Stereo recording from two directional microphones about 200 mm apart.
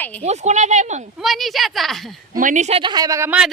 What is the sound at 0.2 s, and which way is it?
Speech, 35° right (ahead or behind).